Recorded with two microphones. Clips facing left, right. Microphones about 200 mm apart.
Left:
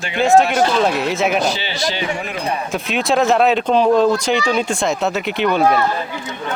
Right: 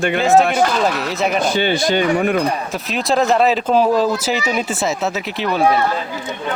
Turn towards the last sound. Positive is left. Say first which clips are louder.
# left 2 dB
turn(degrees=0)  # may be behind; listen again after turning